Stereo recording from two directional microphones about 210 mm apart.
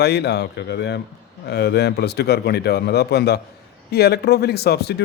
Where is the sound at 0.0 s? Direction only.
50° left (ahead or behind).